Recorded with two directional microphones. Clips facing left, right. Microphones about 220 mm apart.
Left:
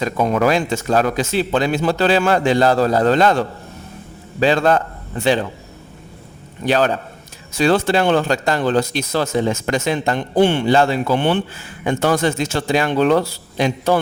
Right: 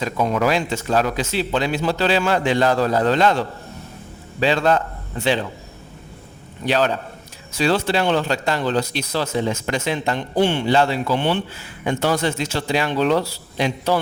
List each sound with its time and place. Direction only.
0.0 s speech: 50° left (ahead or behind)
6.7 s speech: 50° left (ahead or behind)